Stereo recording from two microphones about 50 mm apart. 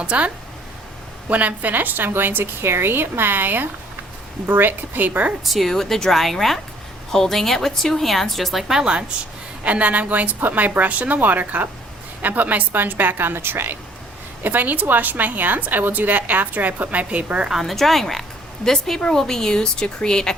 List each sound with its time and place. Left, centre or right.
0.0 s speech: right
1.3 s a woman's voice: right
5.5 s a woman's voice: centre
8.6 s a woman's voice: centre; by 13.7 s right
14.4 s a woman's voice: right
17.5 s speech: centre